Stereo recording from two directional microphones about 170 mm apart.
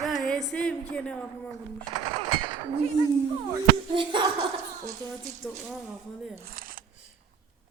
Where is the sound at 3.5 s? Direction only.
30° right (ahead or behind).